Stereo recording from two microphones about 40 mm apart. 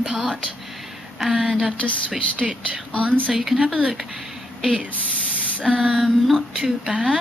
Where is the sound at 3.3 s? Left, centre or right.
Centre.